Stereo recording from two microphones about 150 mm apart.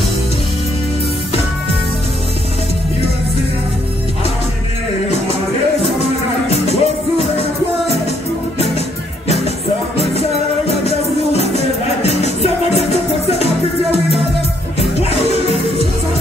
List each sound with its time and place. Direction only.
6.5 s music: 45° left (ahead or behind)
10.9 s music: 45° left (ahead or behind)
14.8 s music: 45° left (ahead or behind)